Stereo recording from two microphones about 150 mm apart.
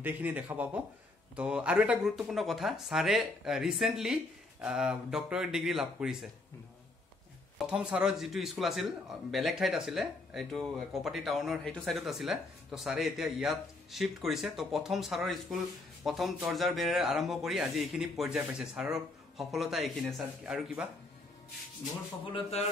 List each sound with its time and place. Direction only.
0.0 s a man's voice: 10° right (ahead or behind)
7.5 s a man's voice: 5° right (ahead or behind)
22.2 s a sound: 40° left (ahead or behind)